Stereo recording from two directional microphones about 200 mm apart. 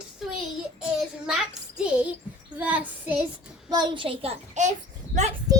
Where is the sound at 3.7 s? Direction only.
20° right (ahead or behind).